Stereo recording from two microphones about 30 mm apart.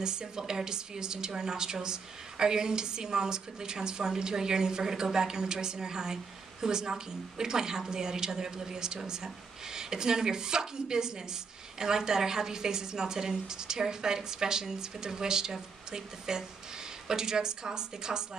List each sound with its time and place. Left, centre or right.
0.0 s a woman's voice: right